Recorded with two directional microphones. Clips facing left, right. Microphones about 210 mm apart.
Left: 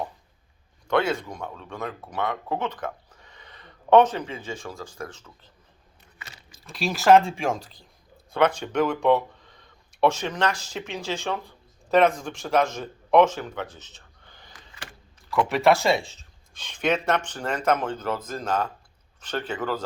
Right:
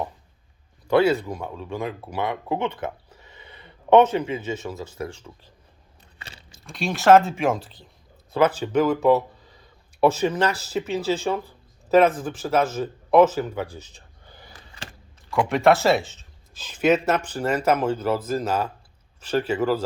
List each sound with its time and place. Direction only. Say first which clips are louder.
0.9 s a man's voice: right 5 dB; 5° right (ahead or behind)
3.1 s a sound: right 3 dB; 5° right (ahead or behind)
4.6 s a man's voice: right 4 dB; 5° right (ahead or behind)
6.1 s a sound: right 2 dB; 30° right (ahead or behind)
6.7 s speech: right 2 dB; centre (ahead or behind)
15.4 s a man's voice: right 3 dB; centre (ahead or behind)